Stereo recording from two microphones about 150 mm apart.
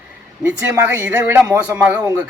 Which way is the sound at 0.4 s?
15° right (ahead or behind).